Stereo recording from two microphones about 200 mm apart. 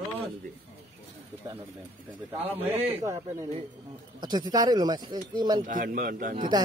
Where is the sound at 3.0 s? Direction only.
15° right (ahead or behind).